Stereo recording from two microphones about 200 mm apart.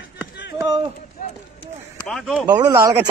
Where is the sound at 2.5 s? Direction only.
15° right (ahead or behind).